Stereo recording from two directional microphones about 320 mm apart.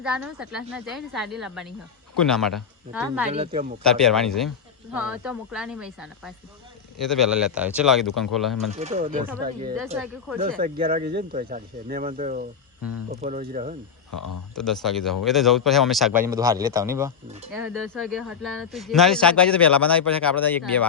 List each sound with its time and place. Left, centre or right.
0.0 s speech: centre
3.3 s speech: centre
3.8 s speech: centre
8.7 s a woman's voice: right
9.8 s speech: centre
10.6 s speech: right
14.1 s speech: left
14.5 s speech: centre